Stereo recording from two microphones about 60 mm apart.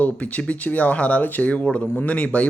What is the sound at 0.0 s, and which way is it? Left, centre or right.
Speech, left.